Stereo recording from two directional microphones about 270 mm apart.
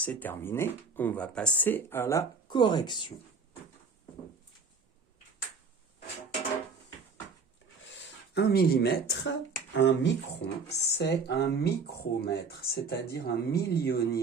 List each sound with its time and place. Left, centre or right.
0.0 s speech: centre
8.0 s speech: left